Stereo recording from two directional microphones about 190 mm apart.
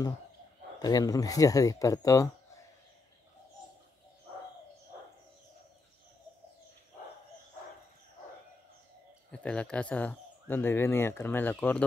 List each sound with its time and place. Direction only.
0.7 s speech: 20° left (ahead or behind)
9.3 s speech: 5° left (ahead or behind)